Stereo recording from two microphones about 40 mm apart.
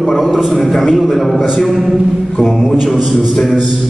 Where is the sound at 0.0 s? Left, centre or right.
Centre.